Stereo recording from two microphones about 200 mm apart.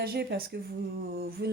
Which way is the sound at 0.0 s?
50° right (ahead or behind).